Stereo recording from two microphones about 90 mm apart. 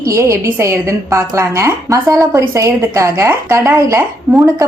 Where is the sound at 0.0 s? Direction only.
35° right (ahead or behind).